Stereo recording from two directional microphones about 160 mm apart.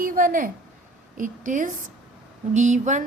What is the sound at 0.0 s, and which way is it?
A woman's voice, 60° right (ahead or behind).